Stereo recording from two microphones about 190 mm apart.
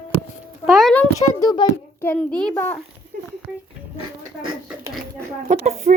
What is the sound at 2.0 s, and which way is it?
Speech, 5° left (ahead or behind).